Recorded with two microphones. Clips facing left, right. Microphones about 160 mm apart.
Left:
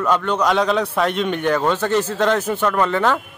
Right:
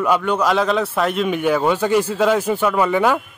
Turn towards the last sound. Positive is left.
turn(degrees=-10)  # may be behind; listen again after turning